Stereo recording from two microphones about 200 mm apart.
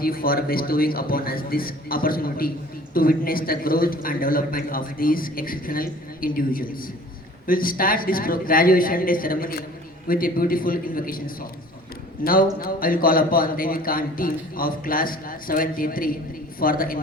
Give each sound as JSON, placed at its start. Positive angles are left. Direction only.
{"t": 0.0, "sound": "a man's voice", "side_deg": 45}
{"t": 12.2, "sound": "a man's voice", "side_deg": 45}